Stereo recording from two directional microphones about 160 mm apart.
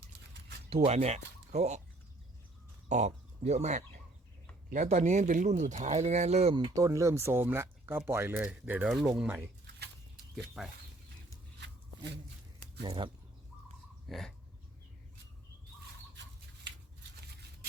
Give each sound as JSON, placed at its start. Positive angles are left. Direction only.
{"t": 0.7, "sound": "speech", "side_deg": -40}
{"t": 2.9, "sound": "speech", "side_deg": -45}
{"t": 6.7, "sound": "speech", "side_deg": -20}
{"t": 12.8, "sound": "speech", "side_deg": -35}
{"t": 14.1, "sound": "speech", "side_deg": 0}